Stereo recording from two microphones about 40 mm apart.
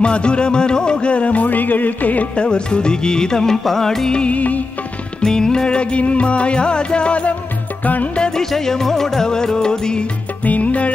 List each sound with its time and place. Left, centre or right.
0.0 s music: left
2.3 s music: left
4.1 s music: left
4.4 s music: left
5.2 s music: centre
7.8 s music: left
8.5 s music: centre
10.4 s music: left